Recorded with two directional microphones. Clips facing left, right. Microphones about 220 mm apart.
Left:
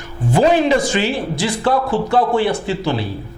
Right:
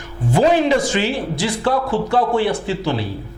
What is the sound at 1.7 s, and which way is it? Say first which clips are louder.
Speech: left 2 dB; 25° left (ahead or behind).